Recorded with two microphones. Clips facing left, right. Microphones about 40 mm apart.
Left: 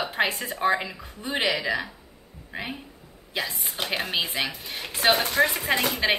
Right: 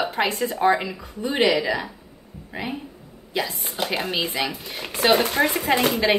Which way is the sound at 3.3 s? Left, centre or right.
Centre.